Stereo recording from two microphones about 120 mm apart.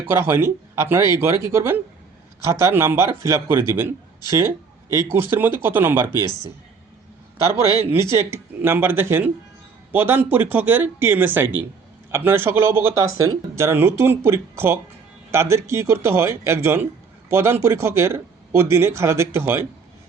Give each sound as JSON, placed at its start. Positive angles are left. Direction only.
{"t": 0.1, "sound": "speech", "side_deg": -20}
{"t": 7.8, "sound": "speech", "side_deg": -20}